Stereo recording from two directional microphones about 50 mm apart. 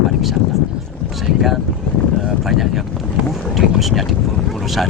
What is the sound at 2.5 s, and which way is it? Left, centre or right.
Speech, centre.